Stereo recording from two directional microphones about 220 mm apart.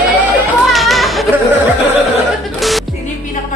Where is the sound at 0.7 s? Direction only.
Centre (ahead or behind).